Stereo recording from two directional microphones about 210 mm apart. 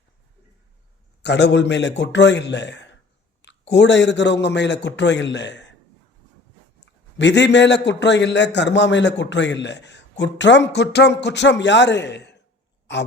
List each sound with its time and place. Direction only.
1.2 s a man's voice: 55° left (ahead or behind)
7.2 s a man's voice: 55° left (ahead or behind)